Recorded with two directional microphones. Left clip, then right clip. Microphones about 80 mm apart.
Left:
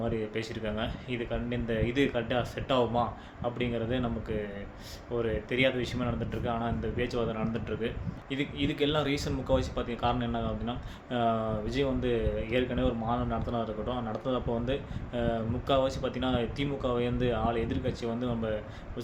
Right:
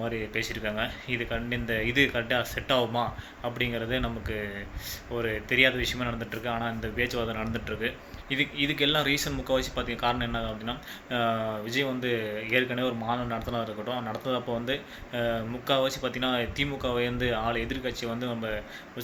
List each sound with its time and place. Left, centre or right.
0.0 s speech: left